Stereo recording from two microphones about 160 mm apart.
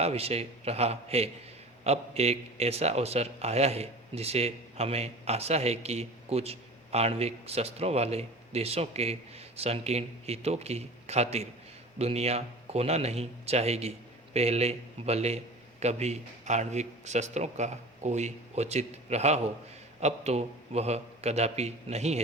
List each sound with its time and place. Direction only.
0.0 s a man's voice: 40° right (ahead or behind)